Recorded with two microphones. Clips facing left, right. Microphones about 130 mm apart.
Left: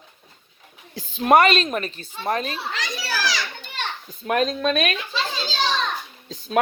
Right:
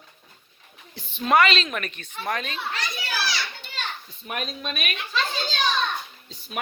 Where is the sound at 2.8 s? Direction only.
90° left.